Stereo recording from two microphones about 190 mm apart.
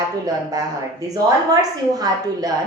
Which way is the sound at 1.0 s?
20° right (ahead or behind).